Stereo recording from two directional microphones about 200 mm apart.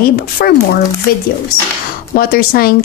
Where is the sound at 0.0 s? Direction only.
45° left (ahead or behind).